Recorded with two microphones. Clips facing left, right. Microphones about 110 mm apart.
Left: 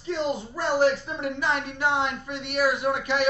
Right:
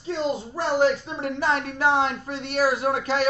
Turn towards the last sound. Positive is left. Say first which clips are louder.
# right 2 dB
turn(degrees=-35)  # may be behind; listen again after turning